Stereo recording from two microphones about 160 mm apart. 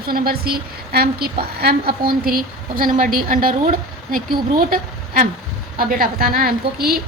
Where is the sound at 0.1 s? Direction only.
70° right (ahead or behind).